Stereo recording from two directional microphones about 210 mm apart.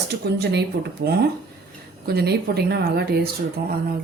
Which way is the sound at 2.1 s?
50° right (ahead or behind).